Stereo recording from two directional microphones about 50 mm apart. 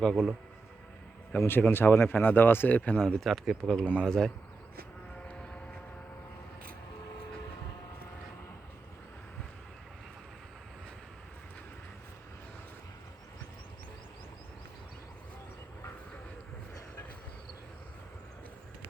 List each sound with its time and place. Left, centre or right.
0.0 s speech: centre
1.5 s speech: left
3.0 s speech: centre
3.6 s speech: centre